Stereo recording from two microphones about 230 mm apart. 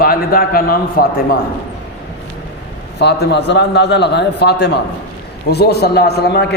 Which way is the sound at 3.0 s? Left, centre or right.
Left.